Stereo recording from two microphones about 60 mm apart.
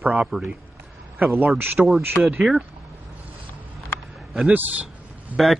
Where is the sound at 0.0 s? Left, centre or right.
Right.